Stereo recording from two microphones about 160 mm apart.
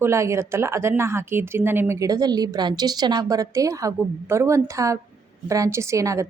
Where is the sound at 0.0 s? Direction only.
20° right (ahead or behind).